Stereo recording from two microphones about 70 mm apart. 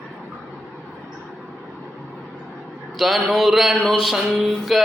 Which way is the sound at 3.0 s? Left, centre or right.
Centre.